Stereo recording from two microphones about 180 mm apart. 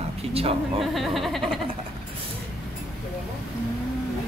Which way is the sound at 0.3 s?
35° right (ahead or behind).